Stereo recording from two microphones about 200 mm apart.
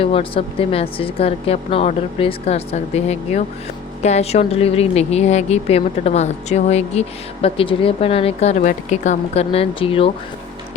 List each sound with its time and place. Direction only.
0.0 s a woman's voice: 30° left (ahead or behind)